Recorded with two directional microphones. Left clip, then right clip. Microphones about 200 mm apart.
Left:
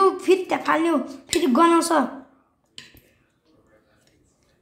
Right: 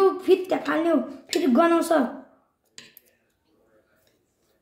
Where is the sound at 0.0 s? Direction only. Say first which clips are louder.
Left 1 dB; 30° left (ahead or behind).